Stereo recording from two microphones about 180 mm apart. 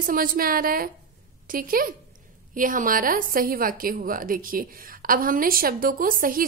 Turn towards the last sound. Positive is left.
turn(degrees=-50)  # may be behind; listen again after turning